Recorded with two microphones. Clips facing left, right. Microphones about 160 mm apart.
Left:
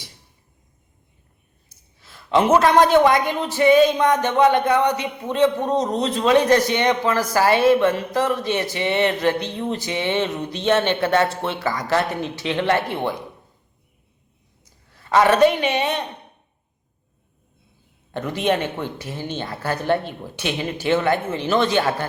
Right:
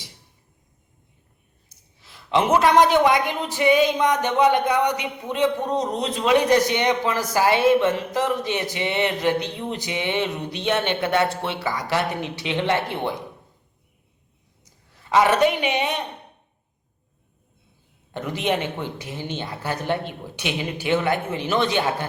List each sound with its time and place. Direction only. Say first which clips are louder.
2.6 s speech: left 1 dB; 15° right (ahead or behind)
15.1 s speech: left 3 dB; 15° right (ahead or behind)
18.1 s speech: left 3 dB; 15° right (ahead or behind)